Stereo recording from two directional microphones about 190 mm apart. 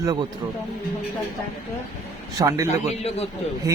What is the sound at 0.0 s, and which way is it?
Speech, 20° right (ahead or behind).